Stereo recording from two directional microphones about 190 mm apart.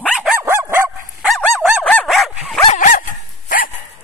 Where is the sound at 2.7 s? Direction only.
45° left (ahead or behind).